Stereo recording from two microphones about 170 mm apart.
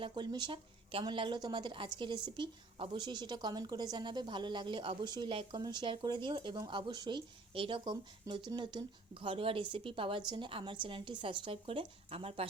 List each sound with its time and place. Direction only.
0.0 s a woman's voice: 25° right (ahead or behind)